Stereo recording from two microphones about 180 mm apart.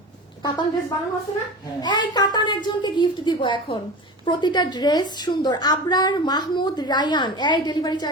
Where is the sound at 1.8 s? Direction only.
20° left (ahead or behind).